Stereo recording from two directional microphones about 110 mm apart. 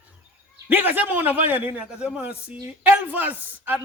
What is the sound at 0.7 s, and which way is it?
Speech, 15° right (ahead or behind).